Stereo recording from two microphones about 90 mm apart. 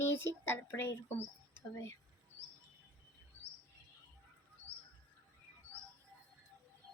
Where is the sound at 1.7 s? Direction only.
35° left (ahead or behind).